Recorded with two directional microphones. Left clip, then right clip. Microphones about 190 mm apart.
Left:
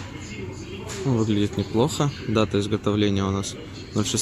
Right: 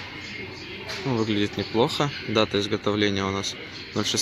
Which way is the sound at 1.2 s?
5° left (ahead or behind).